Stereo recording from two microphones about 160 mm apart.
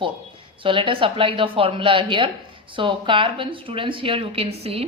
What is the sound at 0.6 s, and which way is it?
Speech, 35° right (ahead or behind).